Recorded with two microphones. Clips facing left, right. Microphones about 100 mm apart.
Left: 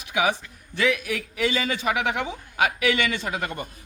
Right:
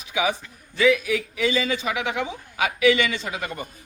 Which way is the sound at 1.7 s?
55° left (ahead or behind).